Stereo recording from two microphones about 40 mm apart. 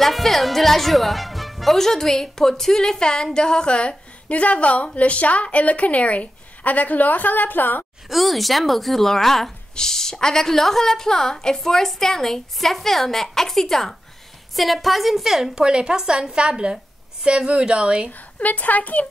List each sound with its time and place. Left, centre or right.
0.0 s a woman's voice: centre; by 3.9 s left
4.3 s a woman's voice: left
8.1 s a woman's voice: centre; by 18.1 s right
18.4 s a woman's voice: left